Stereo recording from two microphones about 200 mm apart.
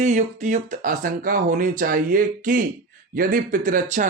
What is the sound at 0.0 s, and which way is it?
Speech, 35° right (ahead or behind).